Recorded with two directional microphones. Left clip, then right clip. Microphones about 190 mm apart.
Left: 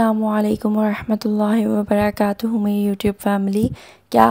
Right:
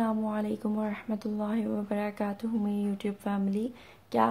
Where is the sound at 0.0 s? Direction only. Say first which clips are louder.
Left 13 dB; 50° left (ahead or behind).